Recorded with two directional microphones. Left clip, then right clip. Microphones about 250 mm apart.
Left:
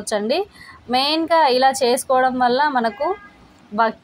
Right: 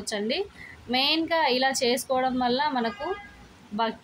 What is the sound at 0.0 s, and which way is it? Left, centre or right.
A woman's voice, centre.